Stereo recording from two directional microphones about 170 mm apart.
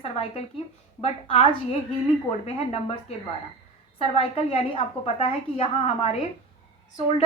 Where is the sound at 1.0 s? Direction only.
35° left (ahead or behind).